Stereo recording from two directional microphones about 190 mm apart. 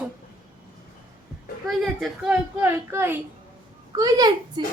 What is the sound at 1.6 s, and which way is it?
A woman's voice, centre (ahead or behind).